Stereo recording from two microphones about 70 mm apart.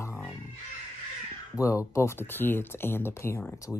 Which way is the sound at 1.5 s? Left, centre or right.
Left.